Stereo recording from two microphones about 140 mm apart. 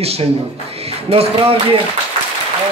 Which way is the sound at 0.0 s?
45° right (ahead or behind).